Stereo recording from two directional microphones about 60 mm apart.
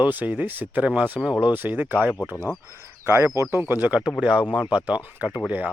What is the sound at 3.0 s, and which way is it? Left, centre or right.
Speech, right.